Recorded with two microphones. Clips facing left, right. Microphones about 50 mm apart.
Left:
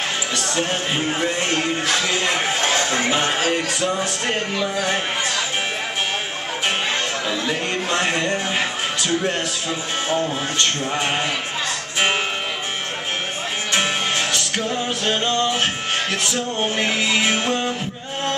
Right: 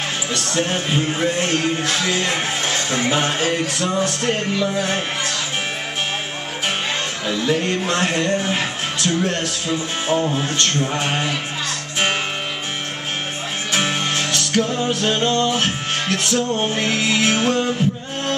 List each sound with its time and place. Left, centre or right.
0.3 s speech: centre
2.6 s music: left
3.1 s speech: centre
7.2 s speech: centre
13.7 s music: centre